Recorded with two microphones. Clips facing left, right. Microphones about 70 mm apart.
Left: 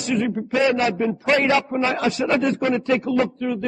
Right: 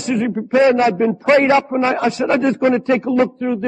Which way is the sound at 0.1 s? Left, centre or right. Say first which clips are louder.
Right 5 dB; right.